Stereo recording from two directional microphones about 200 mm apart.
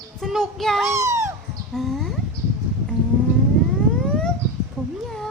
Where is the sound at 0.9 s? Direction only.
15° right (ahead or behind).